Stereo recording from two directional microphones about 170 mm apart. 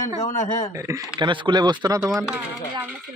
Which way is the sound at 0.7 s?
20° right (ahead or behind).